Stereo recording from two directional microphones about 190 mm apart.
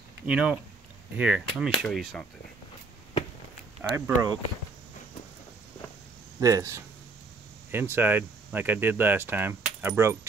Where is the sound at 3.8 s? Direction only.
10° right (ahead or behind).